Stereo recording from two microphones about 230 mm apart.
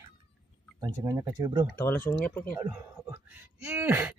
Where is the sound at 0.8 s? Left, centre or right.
Centre.